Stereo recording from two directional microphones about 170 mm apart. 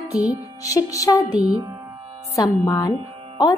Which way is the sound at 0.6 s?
20° left (ahead or behind).